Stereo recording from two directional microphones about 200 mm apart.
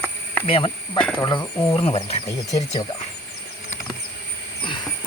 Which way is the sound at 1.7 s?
25° left (ahead or behind).